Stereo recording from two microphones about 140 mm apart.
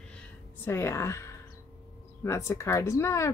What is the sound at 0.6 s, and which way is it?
Speech, 15° left (ahead or behind).